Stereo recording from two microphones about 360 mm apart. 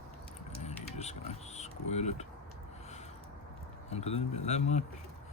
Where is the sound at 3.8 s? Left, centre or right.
Centre.